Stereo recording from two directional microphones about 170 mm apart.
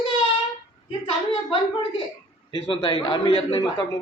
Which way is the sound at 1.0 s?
35° left (ahead or behind).